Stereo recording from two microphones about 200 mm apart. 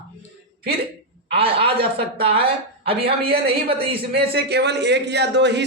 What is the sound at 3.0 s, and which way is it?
Speech, 50° right (ahead or behind).